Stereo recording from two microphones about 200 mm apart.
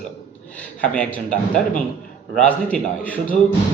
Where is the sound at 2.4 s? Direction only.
5° left (ahead or behind).